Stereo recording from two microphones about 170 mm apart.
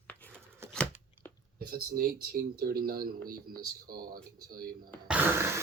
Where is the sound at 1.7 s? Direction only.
60° right (ahead or behind).